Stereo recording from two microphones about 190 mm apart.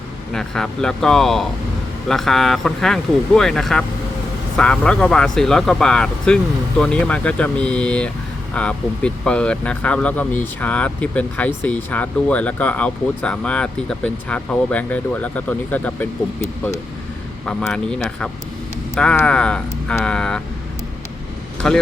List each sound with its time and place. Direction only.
0.3 s speech: 5° left (ahead or behind)
17.4 s speech: 5° left (ahead or behind)
21.6 s speech: 5° left (ahead or behind)